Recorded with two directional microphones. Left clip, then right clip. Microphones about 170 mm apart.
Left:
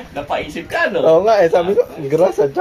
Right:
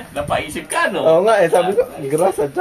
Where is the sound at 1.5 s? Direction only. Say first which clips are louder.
Even; 50° left (ahead or behind).